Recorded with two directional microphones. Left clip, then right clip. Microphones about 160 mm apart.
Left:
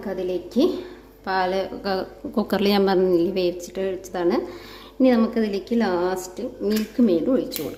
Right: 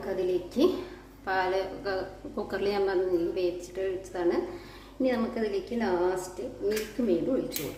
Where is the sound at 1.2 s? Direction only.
65° left (ahead or behind); by 6.2 s 90° left.